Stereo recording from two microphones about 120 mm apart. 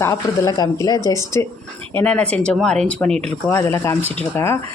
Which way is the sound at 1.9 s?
15° left (ahead or behind).